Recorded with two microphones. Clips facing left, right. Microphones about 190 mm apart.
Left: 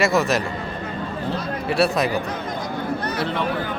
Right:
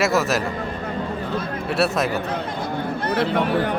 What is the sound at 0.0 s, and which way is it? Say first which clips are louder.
Speech: left 1 dB; centre (ahead or behind).